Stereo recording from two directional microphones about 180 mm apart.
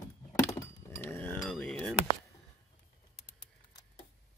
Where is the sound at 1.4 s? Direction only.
Centre (ahead or behind).